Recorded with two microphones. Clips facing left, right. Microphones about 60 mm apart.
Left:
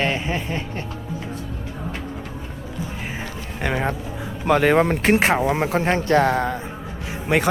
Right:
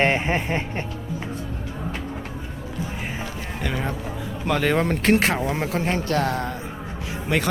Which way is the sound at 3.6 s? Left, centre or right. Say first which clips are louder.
Left 5 dB; left.